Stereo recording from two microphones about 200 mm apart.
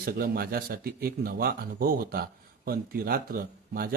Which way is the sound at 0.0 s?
50° right (ahead or behind).